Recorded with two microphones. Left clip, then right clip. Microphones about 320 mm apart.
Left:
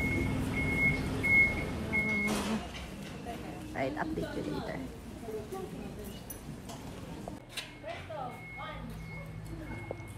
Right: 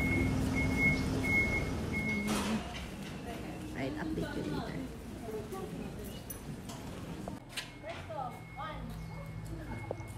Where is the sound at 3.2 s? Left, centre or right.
Centre.